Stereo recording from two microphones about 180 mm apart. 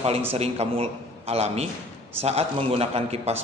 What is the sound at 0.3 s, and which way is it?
A man's voice, 35° right (ahead or behind).